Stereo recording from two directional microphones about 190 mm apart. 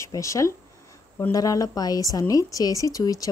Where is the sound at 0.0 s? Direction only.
15° left (ahead or behind).